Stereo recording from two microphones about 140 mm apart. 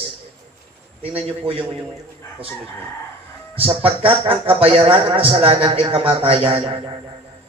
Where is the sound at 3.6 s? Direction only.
45° right (ahead or behind).